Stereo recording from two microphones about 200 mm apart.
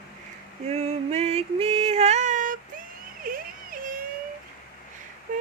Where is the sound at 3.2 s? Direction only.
45° right (ahead or behind).